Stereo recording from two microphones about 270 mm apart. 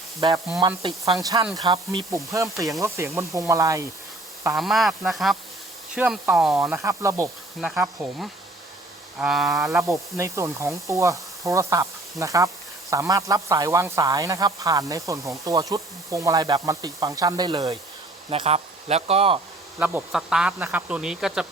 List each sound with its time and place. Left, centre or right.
0.2 s sizzle: centre
1.2 s speech: centre
4.4 s speech: centre; by 19.4 s right
19.8 s speech: centre